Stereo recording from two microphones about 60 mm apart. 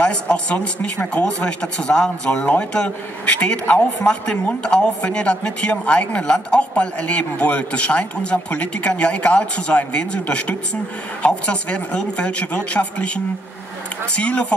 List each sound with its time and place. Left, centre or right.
0.0 s speech: centre